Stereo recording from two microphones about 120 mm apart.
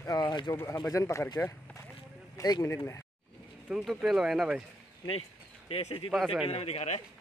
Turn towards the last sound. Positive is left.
turn(degrees=65)  # may be behind; listen again after turning